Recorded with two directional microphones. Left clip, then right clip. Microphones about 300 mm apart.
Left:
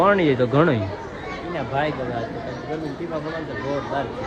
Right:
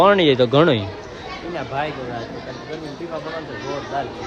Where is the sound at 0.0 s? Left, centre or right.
Centre.